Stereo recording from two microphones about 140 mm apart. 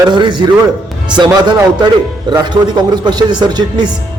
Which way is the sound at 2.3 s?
30° right (ahead or behind).